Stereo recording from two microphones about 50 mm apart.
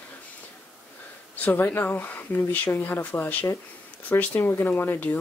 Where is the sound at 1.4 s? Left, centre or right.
Left.